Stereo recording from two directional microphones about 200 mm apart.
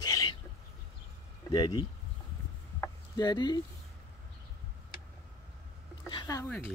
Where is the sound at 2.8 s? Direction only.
20° left (ahead or behind).